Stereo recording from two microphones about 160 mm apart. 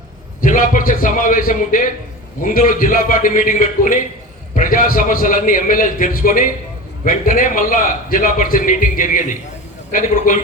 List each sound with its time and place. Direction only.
0.4 s a man's voice: 55° left (ahead or behind)